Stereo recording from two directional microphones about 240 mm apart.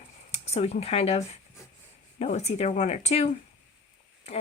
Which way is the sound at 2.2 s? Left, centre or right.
Left.